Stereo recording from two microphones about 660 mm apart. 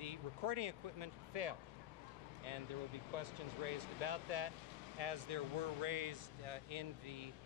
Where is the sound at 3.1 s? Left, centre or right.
Right.